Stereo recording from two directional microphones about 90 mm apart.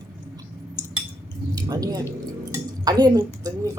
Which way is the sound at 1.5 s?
45° right (ahead or behind).